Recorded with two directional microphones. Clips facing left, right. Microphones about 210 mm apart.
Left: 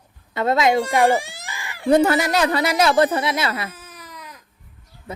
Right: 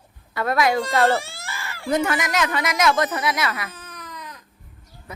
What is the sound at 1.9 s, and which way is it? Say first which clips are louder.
A woman's voice: left 6 dB; 35° left (ahead or behind).